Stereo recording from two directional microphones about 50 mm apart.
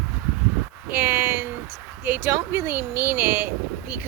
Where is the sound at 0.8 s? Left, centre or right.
Right.